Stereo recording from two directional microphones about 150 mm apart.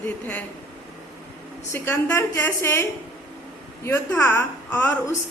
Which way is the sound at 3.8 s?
15° left (ahead or behind).